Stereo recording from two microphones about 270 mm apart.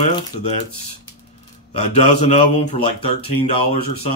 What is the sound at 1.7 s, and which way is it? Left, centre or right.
Speech, left.